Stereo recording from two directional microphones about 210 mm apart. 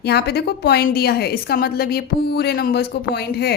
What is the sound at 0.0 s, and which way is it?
A woman's voice, 50° left (ahead or behind).